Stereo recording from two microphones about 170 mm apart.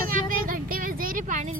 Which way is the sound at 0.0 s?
55° right (ahead or behind).